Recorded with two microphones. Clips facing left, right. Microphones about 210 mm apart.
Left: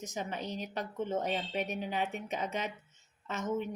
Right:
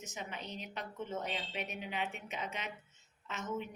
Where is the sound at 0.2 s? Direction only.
40° left (ahead or behind).